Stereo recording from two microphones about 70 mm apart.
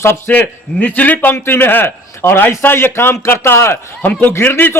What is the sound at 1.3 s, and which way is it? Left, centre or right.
A man's voice, left.